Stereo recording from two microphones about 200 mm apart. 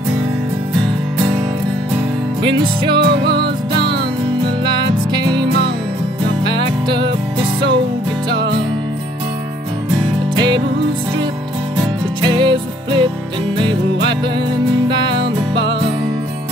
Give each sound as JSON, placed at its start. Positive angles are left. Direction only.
{"t": 3.0, "sound": "music", "side_deg": -60}
{"t": 4.6, "sound": "music", "side_deg": -20}
{"t": 10.3, "sound": "music", "side_deg": -20}
{"t": 12.2, "sound": "music", "side_deg": -25}
{"t": 14.9, "sound": "music", "side_deg": -20}